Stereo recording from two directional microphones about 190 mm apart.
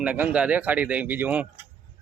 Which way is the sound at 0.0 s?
5° right (ahead or behind).